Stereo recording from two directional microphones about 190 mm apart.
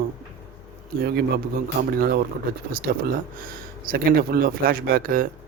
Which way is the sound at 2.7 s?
50° right (ahead or behind).